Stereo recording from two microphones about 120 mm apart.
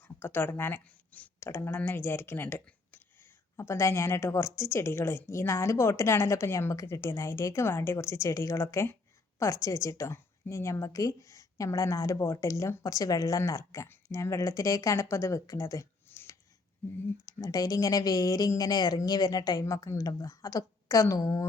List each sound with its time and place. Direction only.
0.2 s a woman's voice: 20° left (ahead or behind)